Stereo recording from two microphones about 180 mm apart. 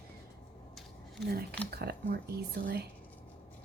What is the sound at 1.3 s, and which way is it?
A woman's voice, 60° right (ahead or behind).